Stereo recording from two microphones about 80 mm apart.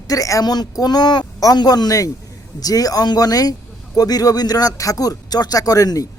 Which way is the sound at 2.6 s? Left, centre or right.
Left.